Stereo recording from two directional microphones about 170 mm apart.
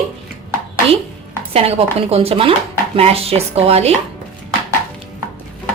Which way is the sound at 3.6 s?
35° right (ahead or behind).